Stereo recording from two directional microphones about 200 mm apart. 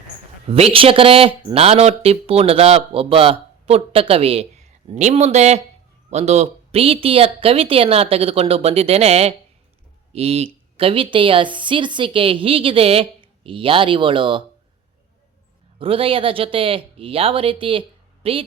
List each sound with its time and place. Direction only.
0.4 s speech: 30° right (ahead or behind)
15.8 s speech: 25° right (ahead or behind)